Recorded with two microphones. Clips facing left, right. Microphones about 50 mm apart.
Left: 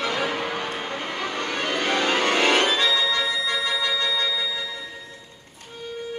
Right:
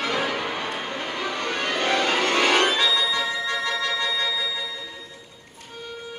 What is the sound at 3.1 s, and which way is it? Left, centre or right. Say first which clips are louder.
Music: left 1 dB; right.